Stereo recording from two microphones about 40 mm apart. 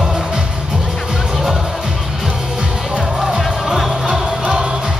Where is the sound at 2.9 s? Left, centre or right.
Centre.